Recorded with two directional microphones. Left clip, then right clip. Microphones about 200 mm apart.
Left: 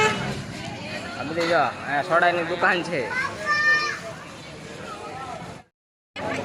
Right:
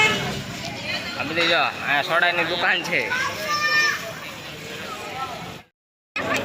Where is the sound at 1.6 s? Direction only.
15° left (ahead or behind).